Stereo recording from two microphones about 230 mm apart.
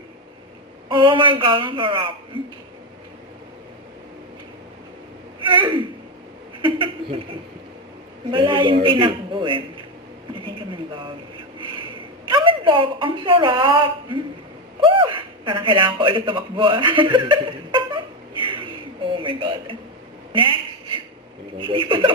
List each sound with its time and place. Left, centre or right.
0.9 s a man's voice: right
5.5 s a man's voice: right
6.6 s a sound: right
8.3 s a man's voice: right
10.3 s a sound: right
12.2 s a woman's voice: right
14.8 s a sound: right
20.3 s a man's voice: right
21.6 s a man's voice: right